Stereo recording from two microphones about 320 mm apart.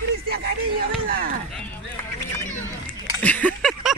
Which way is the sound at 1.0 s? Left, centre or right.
Right.